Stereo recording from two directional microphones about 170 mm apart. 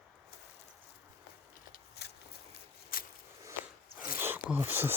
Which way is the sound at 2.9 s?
60° left (ahead or behind).